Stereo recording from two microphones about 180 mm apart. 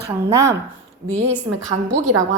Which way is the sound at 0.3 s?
15° right (ahead or behind).